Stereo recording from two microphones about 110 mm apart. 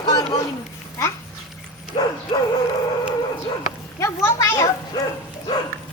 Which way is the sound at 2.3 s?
40° left (ahead or behind).